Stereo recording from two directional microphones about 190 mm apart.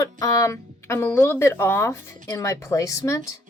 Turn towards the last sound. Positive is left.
turn(degrees=15)  # may be behind; listen again after turning